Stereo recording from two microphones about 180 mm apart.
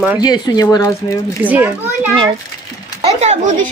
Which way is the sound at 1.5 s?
10° right (ahead or behind).